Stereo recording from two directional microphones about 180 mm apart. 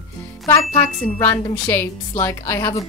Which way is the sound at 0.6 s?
30° left (ahead or behind).